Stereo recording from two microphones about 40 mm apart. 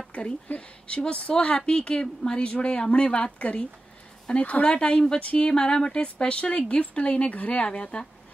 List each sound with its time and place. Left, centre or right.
0.6 s speech: left
4.6 s speech: left
5.2 s speech: left
5.5 s speech: left